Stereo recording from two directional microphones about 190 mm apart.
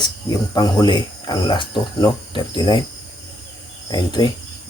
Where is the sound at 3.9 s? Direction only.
20° left (ahead or behind).